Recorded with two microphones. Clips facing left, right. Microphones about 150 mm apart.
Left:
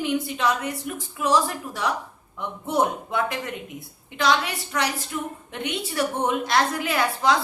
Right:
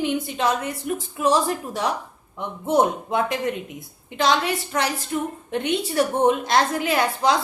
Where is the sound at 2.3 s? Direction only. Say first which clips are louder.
Right 4 dB; 20° right (ahead or behind).